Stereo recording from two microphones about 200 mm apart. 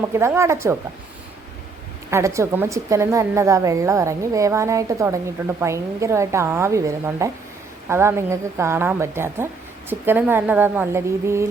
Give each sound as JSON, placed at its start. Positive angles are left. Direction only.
{"t": 0.1, "sound": "a woman's voice", "side_deg": -15}
{"t": 2.0, "sound": "a woman's voice", "side_deg": -15}